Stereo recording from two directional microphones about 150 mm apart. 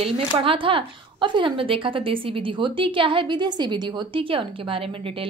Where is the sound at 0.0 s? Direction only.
35° right (ahead or behind).